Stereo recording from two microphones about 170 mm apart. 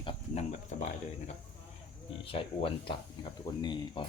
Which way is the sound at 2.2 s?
35° left (ahead or behind).